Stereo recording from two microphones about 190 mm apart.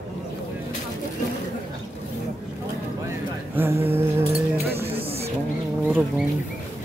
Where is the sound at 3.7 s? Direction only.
30° right (ahead or behind).